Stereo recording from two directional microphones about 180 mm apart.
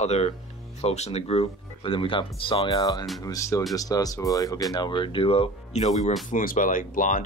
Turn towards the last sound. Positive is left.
turn(degrees=45)  # may be behind; listen again after turning